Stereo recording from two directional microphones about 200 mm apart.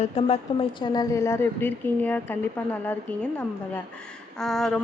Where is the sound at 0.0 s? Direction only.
30° left (ahead or behind).